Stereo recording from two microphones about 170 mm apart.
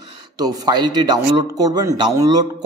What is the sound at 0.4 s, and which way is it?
Speech, 25° right (ahead or behind).